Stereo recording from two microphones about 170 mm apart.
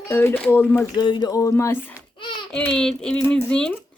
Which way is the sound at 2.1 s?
30° left (ahead or behind).